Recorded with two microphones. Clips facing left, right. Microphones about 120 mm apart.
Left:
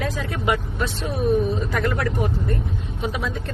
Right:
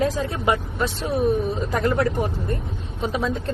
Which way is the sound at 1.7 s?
25° right (ahead or behind).